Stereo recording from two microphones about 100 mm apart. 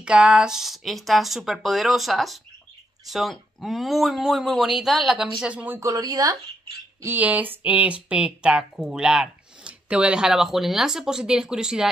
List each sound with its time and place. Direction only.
0.0 s speech: 10° right (ahead or behind)
5.8 s speech: 35° right (ahead or behind)
7.0 s speech: 20° right (ahead or behind)